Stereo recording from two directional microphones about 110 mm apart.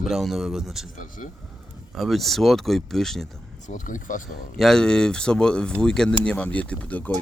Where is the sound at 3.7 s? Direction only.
90° left.